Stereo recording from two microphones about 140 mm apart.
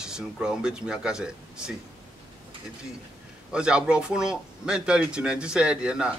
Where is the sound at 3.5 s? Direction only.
5° right (ahead or behind).